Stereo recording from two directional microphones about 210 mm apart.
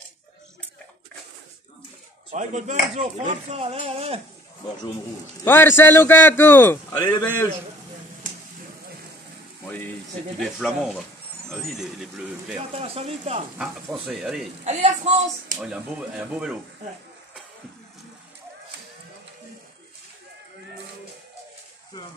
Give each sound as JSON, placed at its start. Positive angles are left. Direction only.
{"t": 2.3, "sound": "chopping", "side_deg": -35}
{"t": 5.4, "sound": "a man's voice", "side_deg": 10}
{"t": 10.4, "sound": "speech", "side_deg": 0}
{"t": 12.7, "sound": "chopping", "side_deg": -30}
{"t": 14.0, "sound": "speech", "side_deg": 0}
{"t": 14.6, "sound": "speech", "side_deg": -35}
{"t": 15.6, "sound": "speech", "side_deg": 0}